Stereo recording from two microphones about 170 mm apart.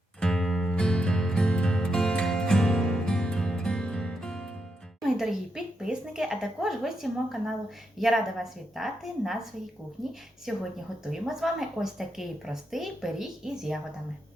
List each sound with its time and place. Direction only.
0.2 s music: 5° left (ahead or behind)
4.9 s a woman's voice: 5° right (ahead or behind)